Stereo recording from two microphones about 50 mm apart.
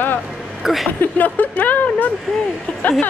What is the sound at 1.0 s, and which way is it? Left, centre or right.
Speech, left.